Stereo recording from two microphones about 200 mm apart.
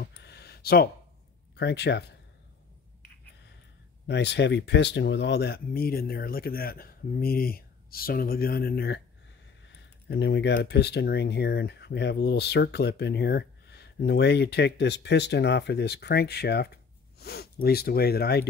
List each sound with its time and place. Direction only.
0.2 s a sound: 55° left (ahead or behind)
1.6 s speech: 60° left (ahead or behind)
4.1 s speech: 60° left (ahead or behind)
10.0 s speech: 60° left (ahead or behind)